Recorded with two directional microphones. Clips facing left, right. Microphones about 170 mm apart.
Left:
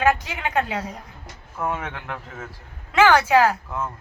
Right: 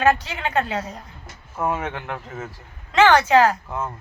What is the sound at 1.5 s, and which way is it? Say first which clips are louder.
Speech: right 3 dB; 10° right (ahead or behind).